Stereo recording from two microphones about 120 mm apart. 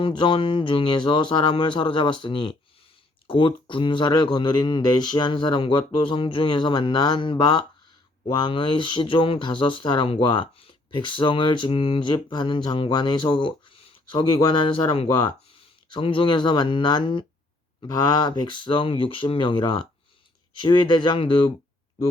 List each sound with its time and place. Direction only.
0.2 s speech: 45° left (ahead or behind)